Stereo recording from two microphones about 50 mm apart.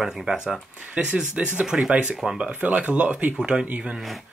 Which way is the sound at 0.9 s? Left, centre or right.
Right.